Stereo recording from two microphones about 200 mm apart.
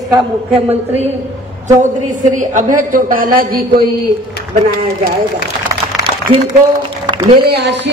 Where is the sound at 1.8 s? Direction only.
40° right (ahead or behind).